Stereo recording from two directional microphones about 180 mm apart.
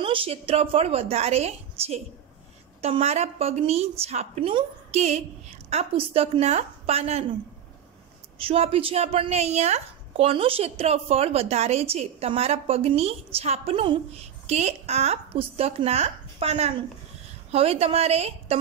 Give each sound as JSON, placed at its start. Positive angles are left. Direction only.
{"t": 0.0, "sound": "a woman's voice", "side_deg": -30}
{"t": 8.4, "sound": "a woman's voice", "side_deg": -30}